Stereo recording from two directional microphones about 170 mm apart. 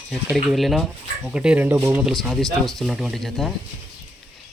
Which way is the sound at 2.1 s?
Centre (ahead or behind).